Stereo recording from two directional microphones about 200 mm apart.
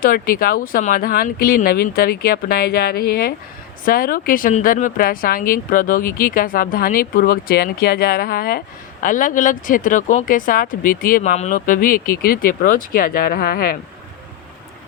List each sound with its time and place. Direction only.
0.0 s speech: 45° left (ahead or behind)